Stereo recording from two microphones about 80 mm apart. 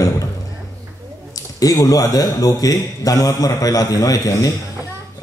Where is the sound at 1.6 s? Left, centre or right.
Left.